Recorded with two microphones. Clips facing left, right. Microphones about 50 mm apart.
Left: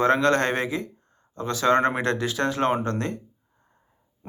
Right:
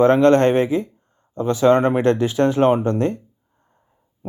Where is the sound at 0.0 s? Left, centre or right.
Right.